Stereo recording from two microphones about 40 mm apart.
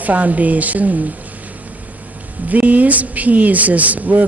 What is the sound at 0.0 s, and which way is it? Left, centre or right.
Speech, right.